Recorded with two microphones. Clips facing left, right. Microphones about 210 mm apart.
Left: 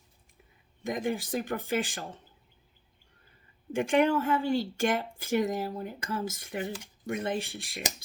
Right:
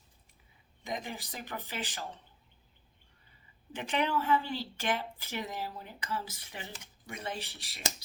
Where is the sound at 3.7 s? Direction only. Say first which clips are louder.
Left 8 dB; 45° left (ahead or behind).